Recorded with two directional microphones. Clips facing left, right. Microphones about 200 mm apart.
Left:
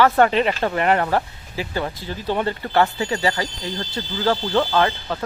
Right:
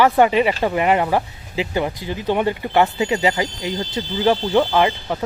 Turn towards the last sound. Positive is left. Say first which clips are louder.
# right 2 dB
turn(degrees=-15)  # may be behind; listen again after turning